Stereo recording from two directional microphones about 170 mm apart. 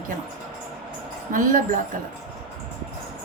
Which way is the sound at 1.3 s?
50° right (ahead or behind).